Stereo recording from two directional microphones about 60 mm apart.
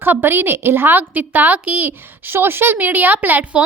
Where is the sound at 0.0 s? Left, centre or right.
Right.